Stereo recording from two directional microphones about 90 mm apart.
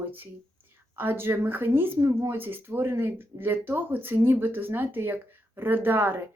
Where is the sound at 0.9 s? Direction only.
25° right (ahead or behind).